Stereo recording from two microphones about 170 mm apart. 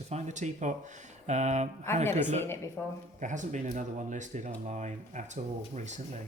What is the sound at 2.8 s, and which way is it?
Speech, 10° left (ahead or behind).